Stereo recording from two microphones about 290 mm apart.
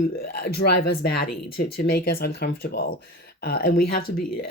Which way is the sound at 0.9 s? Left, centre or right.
Left.